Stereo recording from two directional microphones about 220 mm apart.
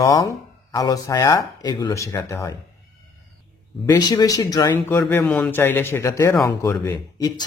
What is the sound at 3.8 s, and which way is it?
Speech, 15° left (ahead or behind).